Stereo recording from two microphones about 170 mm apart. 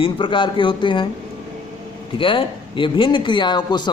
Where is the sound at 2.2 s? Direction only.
30° left (ahead or behind).